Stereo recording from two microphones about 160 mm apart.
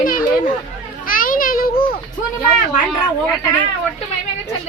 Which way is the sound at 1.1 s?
60° left (ahead or behind).